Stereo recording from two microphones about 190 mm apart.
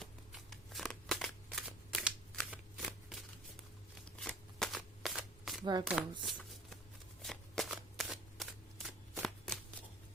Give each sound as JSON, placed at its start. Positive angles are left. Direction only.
{"t": 0.0, "sound": "shuffling cards", "side_deg": 0}
{"t": 5.8, "sound": "speech", "side_deg": 0}
{"t": 7.2, "sound": "shuffling cards", "side_deg": 0}